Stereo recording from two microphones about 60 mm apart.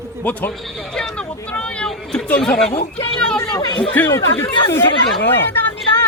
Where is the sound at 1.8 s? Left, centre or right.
Centre.